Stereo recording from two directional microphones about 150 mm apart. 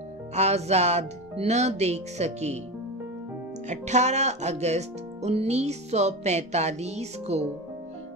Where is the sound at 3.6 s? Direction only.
50° right (ahead or behind).